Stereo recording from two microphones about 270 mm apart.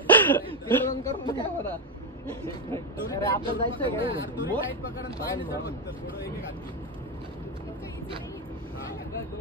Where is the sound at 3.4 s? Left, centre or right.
Centre.